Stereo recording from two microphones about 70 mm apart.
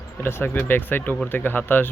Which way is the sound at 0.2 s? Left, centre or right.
Left.